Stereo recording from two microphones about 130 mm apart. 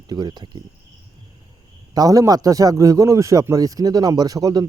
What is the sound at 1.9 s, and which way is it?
A man's voice, 30° right (ahead or behind).